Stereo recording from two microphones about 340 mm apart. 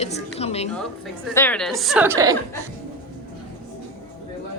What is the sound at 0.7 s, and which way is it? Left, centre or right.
A woman's voice, centre.